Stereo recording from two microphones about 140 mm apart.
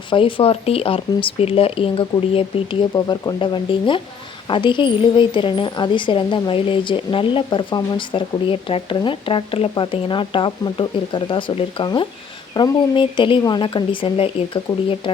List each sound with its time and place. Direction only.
0.1 s a woman's voice: 40° left (ahead or behind)
2.9 s a woman's voice: 30° left (ahead or behind)